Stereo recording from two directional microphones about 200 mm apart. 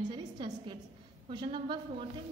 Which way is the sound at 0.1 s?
25° right (ahead or behind).